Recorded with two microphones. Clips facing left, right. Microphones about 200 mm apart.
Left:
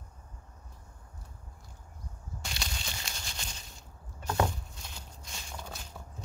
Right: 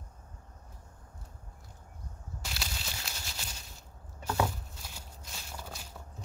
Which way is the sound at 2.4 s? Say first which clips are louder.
Even; 5° right (ahead or behind).